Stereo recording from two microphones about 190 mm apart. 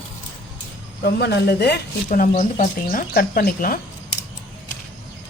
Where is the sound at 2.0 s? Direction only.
40° left (ahead or behind).